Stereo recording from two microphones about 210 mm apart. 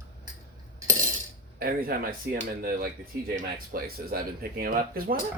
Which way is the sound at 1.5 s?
45° right (ahead or behind).